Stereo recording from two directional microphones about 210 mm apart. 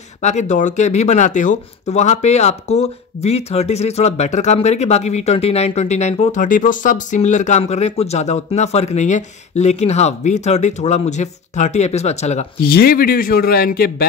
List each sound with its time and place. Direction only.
0.2 s speech: 35° left (ahead or behind)
12.6 s a man's voice: 45° left (ahead or behind)